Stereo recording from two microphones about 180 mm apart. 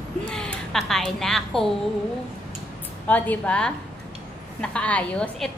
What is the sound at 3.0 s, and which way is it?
A woman's voice, 10° left (ahead or behind).